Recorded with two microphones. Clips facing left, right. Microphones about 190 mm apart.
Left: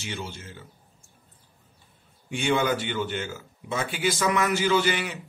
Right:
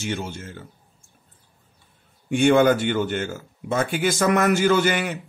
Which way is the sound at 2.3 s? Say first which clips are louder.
Right 8 dB; 50° right (ahead or behind).